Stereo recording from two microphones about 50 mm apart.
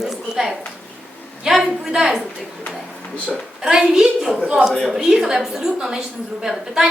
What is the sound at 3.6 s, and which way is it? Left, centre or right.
A woman's voice, centre.